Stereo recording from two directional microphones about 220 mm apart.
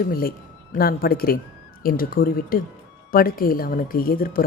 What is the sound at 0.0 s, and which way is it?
Speech, 40° left (ahead or behind).